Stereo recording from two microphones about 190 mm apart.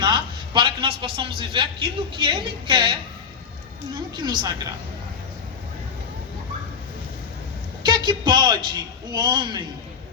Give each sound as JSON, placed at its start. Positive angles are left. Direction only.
{"t": 0.0, "sound": "a man's voice", "side_deg": -25}
{"t": 3.9, "sound": "a man's voice", "side_deg": -25}
{"t": 7.9, "sound": "a man's voice", "side_deg": -25}